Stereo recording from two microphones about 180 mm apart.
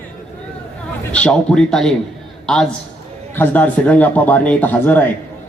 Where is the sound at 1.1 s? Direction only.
5° left (ahead or behind).